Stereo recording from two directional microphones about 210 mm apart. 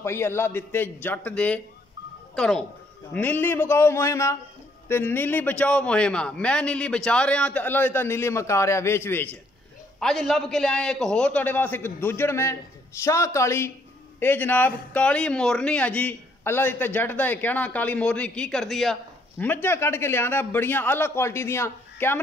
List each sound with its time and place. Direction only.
0.0 s a man's voice: 10° left (ahead or behind)